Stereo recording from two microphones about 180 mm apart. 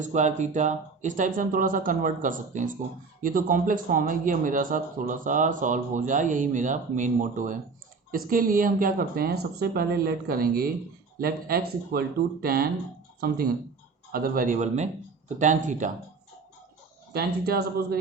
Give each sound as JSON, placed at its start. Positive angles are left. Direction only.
{"t": 0.0, "sound": "speech", "side_deg": -40}
{"t": 17.1, "sound": "speech", "side_deg": -60}